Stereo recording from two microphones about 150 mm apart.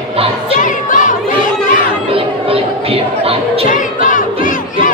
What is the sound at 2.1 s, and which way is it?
Music, 40° right (ahead or behind).